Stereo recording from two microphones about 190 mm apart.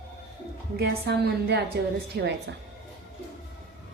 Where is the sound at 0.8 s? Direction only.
55° right (ahead or behind).